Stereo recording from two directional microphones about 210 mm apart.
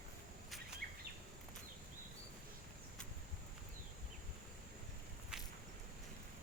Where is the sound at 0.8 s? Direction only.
45° right (ahead or behind).